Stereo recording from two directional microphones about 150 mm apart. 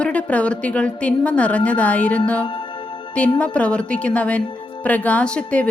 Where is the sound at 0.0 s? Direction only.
10° left (ahead or behind).